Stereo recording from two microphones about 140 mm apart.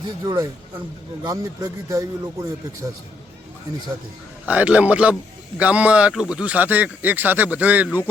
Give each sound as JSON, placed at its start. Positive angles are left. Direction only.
{"t": 0.2, "sound": "speech", "side_deg": -25}
{"t": 4.4, "sound": "a man's voice", "side_deg": -10}